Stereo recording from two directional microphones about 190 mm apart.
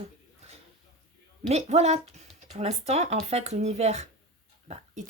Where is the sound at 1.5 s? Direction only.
35° right (ahead or behind).